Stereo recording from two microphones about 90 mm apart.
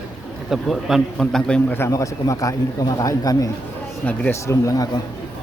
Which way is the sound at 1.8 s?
35° left (ahead or behind).